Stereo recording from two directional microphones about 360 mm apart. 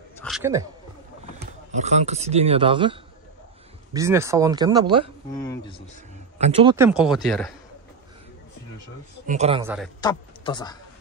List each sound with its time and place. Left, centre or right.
0.2 s a woman's voice: centre
1.8 s speech: centre
5.4 s speech: centre
6.3 s a man's voice: centre
9.2 s speech: centre
10.0 s speech: centre